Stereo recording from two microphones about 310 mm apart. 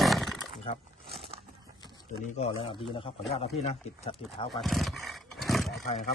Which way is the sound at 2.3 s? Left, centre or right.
Centre.